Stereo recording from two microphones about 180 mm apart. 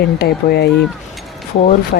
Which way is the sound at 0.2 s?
65° left (ahead or behind).